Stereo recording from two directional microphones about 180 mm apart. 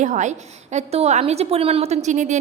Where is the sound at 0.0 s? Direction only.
45° right (ahead or behind).